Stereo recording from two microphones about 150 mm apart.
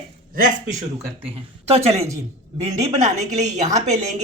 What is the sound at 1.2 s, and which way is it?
Speech, 40° right (ahead or behind).